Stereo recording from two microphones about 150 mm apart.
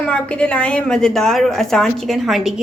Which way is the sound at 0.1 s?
5° left (ahead or behind).